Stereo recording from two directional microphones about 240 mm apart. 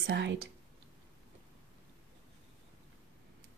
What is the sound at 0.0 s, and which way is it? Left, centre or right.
Speech, right.